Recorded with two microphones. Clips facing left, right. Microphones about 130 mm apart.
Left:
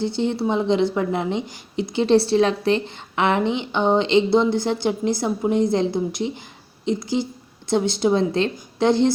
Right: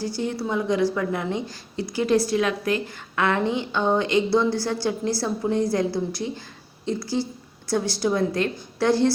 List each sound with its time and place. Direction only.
0.0 s a woman's voice: 25° left (ahead or behind)